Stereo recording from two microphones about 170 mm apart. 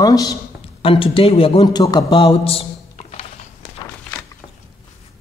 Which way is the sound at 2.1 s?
30° left (ahead or behind).